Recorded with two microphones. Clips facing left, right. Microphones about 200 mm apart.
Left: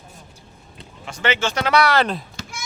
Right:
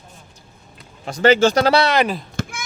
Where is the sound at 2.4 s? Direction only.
55° right (ahead or behind).